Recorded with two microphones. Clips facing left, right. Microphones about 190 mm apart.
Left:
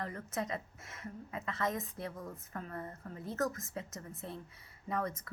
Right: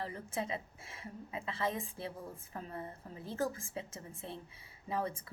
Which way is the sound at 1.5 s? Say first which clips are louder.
Left 1 dB; 30° right (ahead or behind).